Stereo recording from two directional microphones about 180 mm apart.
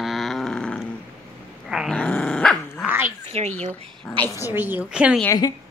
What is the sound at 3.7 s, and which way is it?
Speech, 10° left (ahead or behind).